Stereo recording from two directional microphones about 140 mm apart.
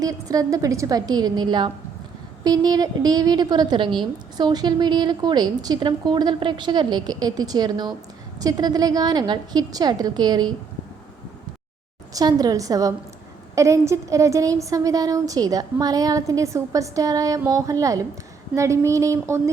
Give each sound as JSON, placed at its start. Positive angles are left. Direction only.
{"t": 0.0, "sound": "a woman's voice", "side_deg": -25}
{"t": 12.1, "sound": "a woman's voice", "side_deg": -25}